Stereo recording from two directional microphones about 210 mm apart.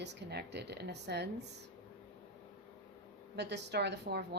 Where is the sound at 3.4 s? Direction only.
55° right (ahead or behind).